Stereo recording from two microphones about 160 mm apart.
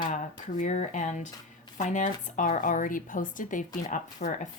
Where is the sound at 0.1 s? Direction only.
50° left (ahead or behind).